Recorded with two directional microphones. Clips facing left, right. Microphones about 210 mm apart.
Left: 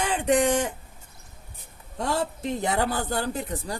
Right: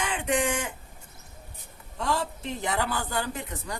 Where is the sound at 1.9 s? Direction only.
40° left (ahead or behind).